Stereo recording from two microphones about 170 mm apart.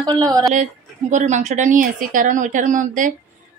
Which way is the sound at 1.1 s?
45° right (ahead or behind).